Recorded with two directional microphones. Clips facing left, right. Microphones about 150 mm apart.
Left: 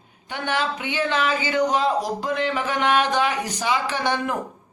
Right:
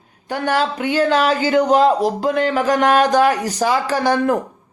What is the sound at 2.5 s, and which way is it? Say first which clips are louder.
A man's voice: right 7 dB; 40° right (ahead or behind).